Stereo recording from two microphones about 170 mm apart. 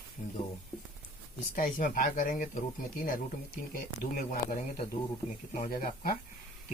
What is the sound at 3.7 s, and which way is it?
Speech, 60° left (ahead or behind).